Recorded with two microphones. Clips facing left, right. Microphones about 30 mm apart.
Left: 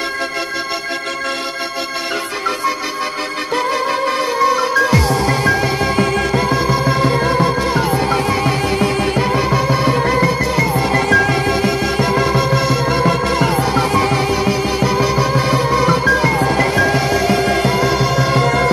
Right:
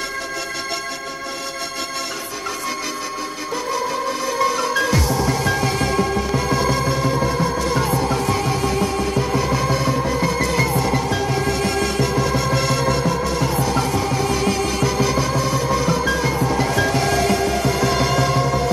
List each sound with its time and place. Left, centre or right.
4.4 s music: left
7.0 s music: left
7.7 s music: left
9.8 s music: left
10.4 s music: centre
11.1 s music: left
11.4 s music: left
12.5 s music: centre
13.0 s music: left
14.3 s music: left
15.3 s music: left
17.4 s music: left
17.9 s music: centre
18.4 s music: left